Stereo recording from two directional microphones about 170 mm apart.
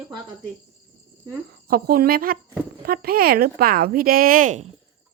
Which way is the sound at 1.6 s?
60° right (ahead or behind).